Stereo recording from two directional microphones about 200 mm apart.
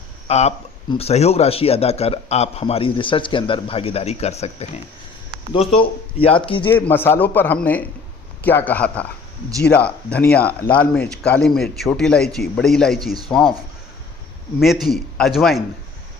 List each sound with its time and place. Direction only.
0.3 s a man's voice: 30° left (ahead or behind)
6.7 s speech: 10° left (ahead or behind)
14.6 s speech: centre (ahead or behind)